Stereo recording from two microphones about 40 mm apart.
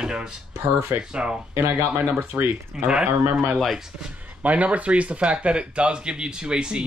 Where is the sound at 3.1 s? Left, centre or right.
Right.